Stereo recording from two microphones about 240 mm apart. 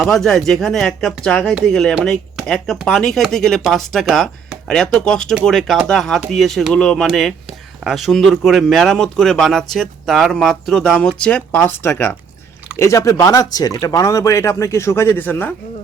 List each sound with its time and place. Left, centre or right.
0.0 s speech: centre